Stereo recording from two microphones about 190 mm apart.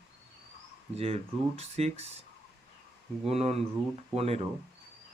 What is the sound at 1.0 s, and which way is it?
Speech, 35° right (ahead or behind).